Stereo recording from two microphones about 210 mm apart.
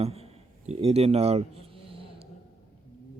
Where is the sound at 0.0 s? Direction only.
30° right (ahead or behind).